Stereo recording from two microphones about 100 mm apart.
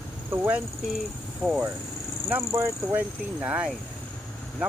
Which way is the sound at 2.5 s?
25° right (ahead or behind).